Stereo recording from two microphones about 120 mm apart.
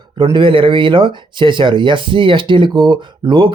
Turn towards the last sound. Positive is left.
turn(degrees=-45)  # may be behind; listen again after turning